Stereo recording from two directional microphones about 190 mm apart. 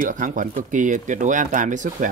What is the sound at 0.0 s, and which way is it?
Speech, 45° right (ahead or behind).